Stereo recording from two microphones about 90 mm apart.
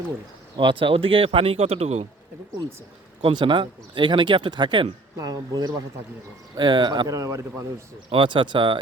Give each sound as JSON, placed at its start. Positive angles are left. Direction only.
{"t": 0.5, "sound": "speech", "side_deg": -65}
{"t": 3.2, "sound": "speech", "side_deg": -65}
{"t": 5.1, "sound": "speech", "side_deg": -45}
{"t": 6.6, "sound": "speech", "side_deg": -55}
{"t": 7.1, "sound": "speech", "side_deg": -40}
{"t": 8.1, "sound": "speech", "side_deg": -65}